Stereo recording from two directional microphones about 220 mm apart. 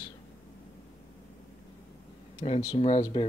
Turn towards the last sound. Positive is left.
turn(degrees=30)  # may be behind; listen again after turning